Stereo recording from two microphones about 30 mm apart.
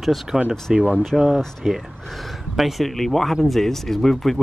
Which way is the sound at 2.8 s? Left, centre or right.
Centre.